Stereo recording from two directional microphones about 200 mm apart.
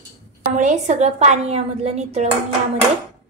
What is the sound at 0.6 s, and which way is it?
A woman's voice, 35° right (ahead or behind).